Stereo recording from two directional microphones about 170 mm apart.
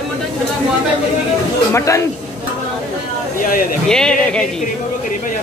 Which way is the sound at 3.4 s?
55° left (ahead or behind).